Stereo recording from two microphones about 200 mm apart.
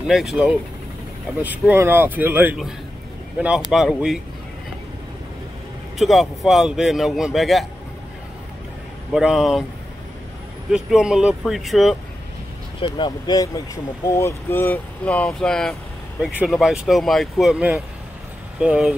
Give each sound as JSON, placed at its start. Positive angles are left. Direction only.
{"t": 0.0, "sound": "a man's voice", "side_deg": 0}
{"t": 5.9, "sound": "a man's voice", "side_deg": 0}
{"t": 9.1, "sound": "a man's voice", "side_deg": 0}
{"t": 10.7, "sound": "a man's voice", "side_deg": -5}
{"t": 12.8, "sound": "a man's voice", "side_deg": 25}